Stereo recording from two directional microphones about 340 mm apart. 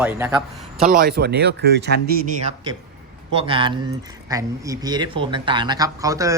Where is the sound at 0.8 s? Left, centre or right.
Right.